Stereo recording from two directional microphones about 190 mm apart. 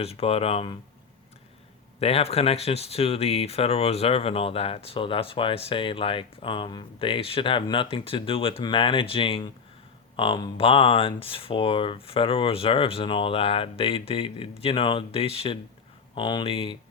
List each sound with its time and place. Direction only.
0.0 s speech: 30° left (ahead or behind)
2.0 s speech: 30° left (ahead or behind)